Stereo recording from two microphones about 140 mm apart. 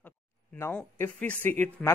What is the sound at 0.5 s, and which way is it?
Speech, 15° left (ahead or behind).